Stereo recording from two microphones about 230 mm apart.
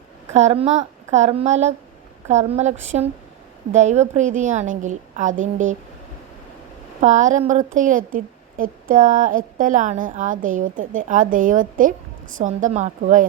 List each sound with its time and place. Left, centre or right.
0.3 s a child's voice: right
7.0 s a woman's voice: right